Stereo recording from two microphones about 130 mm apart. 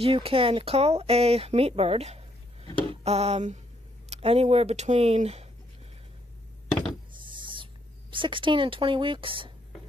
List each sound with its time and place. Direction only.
0.0 s speech: 45° right (ahead or behind)
7.2 s owl: 40° right (ahead or behind)
8.1 s speech: 40° right (ahead or behind)